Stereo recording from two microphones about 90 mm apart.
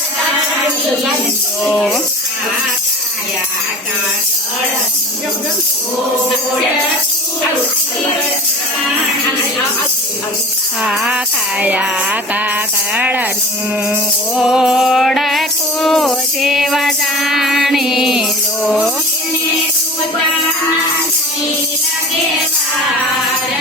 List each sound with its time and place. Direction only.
1.6 s speech: 5° left (ahead or behind)
10.8 s music: 10° right (ahead or behind)
12.9 s speech: 15° right (ahead or behind)
14.3 s music: 5° right (ahead or behind)